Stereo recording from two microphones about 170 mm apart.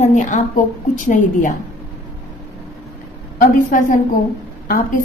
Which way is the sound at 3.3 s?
50° left (ahead or behind).